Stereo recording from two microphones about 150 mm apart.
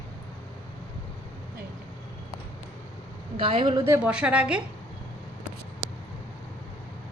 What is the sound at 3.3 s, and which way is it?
Speech, 35° right (ahead or behind).